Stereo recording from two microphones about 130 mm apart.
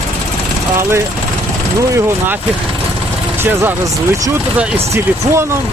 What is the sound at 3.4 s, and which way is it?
Speech, 15° right (ahead or behind).